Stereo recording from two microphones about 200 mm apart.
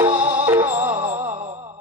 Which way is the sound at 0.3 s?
10° right (ahead or behind).